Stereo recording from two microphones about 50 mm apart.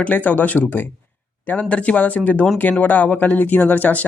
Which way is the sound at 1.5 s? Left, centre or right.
Left.